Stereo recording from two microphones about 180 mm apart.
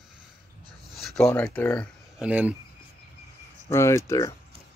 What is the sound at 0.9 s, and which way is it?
Speech, centre (ahead or behind).